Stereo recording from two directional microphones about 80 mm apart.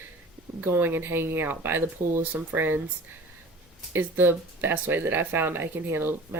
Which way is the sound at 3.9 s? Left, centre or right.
Right.